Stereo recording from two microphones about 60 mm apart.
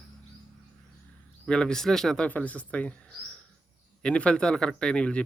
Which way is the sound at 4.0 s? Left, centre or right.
Centre.